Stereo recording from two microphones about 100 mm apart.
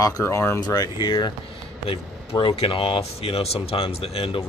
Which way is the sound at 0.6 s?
40° left (ahead or behind).